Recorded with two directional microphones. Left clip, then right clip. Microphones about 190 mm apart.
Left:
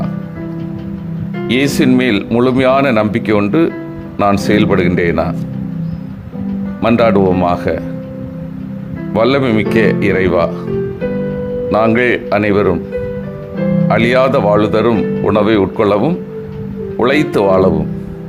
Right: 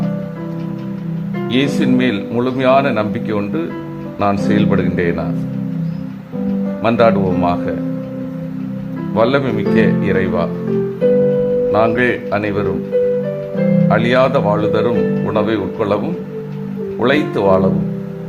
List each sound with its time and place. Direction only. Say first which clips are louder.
1.5 s speech: left 4 dB; 35° left (ahead or behind)
6.8 s speech: left 2 dB; 35° left (ahead or behind)
9.1 s speech: left 3 dB; 35° left (ahead or behind)
11.7 s speech: left 7 dB; 35° left (ahead or behind)
13.8 s speech: left 3 dB; 35° left (ahead or behind)